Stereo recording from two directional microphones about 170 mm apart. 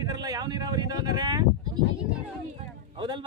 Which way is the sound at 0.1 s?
20° right (ahead or behind).